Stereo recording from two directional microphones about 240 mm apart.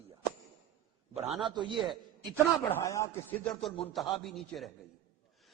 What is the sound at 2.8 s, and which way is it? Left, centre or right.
Speech, centre.